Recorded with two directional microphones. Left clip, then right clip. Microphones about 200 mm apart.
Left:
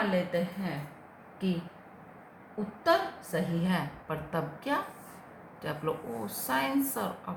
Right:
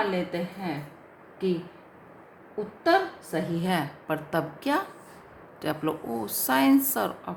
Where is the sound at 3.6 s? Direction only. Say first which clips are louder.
Right 5 dB; 50° right (ahead or behind).